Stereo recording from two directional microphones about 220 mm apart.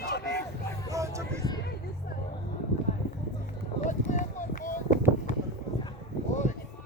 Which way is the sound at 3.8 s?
35° left (ahead or behind).